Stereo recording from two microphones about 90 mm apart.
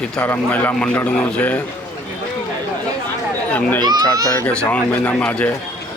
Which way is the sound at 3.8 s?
50° right (ahead or behind).